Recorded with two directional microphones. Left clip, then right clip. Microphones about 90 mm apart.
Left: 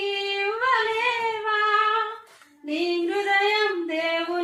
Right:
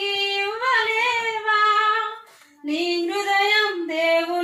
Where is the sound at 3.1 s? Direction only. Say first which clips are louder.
Right 1 dB; 50° right (ahead or behind).